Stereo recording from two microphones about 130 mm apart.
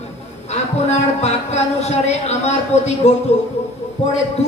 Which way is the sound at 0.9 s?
60° left (ahead or behind).